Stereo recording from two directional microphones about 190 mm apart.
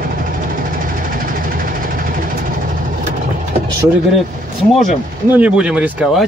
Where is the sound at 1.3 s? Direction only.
45° right (ahead or behind).